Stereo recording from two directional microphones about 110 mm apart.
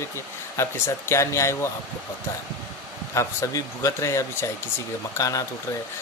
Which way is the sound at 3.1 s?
30° left (ahead or behind).